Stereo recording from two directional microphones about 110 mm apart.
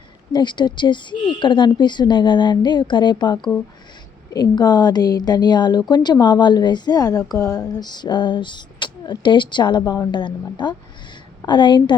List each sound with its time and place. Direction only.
0.3 s a woman's voice: 45° left (ahead or behind)